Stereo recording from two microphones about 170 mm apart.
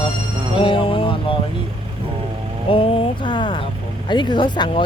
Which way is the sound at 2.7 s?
30° left (ahead or behind).